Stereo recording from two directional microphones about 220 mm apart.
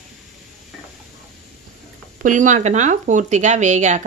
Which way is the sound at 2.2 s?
35° right (ahead or behind).